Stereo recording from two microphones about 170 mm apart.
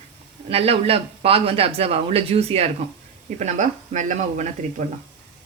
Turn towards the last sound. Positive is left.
turn(degrees=-45)  # may be behind; listen again after turning